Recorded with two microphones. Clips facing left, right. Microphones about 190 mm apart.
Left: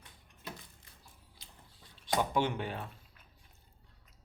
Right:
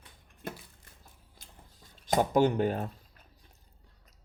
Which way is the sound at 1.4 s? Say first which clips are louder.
Right 4 dB; 45° right (ahead or behind).